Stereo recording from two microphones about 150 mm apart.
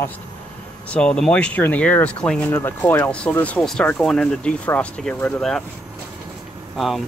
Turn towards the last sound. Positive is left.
turn(degrees=0)  # may be behind; listen again after turning